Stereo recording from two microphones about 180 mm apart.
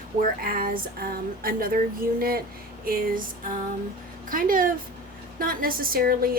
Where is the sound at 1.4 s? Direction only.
55° right (ahead or behind).